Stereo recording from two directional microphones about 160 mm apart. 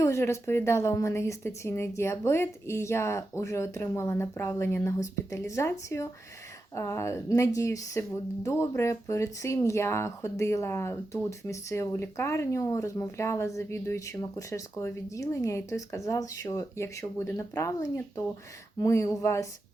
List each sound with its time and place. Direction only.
0.0 s speech: 15° left (ahead or behind)
6.7 s speech: 15° left (ahead or behind)